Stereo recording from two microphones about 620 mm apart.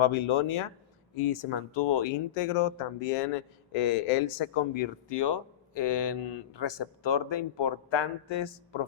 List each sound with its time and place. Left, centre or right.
0.0 s speech: left
3.7 s speech: left